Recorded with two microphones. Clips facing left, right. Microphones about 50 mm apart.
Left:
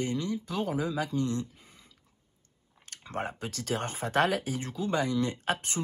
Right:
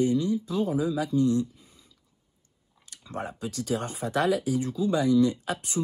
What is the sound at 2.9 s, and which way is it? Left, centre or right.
Speech, left.